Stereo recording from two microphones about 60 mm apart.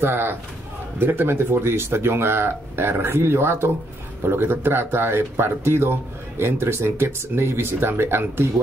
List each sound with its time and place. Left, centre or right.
0.0 s speech: right